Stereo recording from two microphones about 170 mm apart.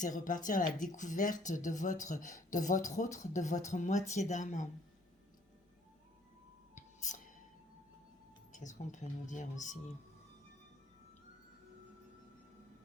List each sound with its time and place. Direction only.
0.0 s speech: 50° left (ahead or behind)
6.7 s music: 45° left (ahead or behind)
8.5 s speech: 45° left (ahead or behind)